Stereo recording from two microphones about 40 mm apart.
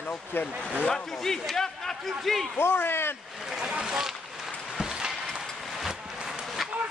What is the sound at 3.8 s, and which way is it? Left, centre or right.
Speech, centre.